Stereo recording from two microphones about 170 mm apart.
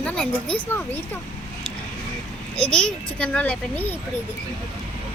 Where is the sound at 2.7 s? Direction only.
5° left (ahead or behind).